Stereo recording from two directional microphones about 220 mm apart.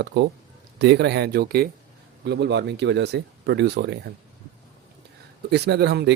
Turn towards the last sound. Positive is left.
turn(degrees=-50)  # may be behind; listen again after turning